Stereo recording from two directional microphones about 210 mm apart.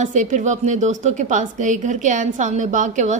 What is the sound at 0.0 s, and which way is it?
A woman's voice, 35° right (ahead or behind).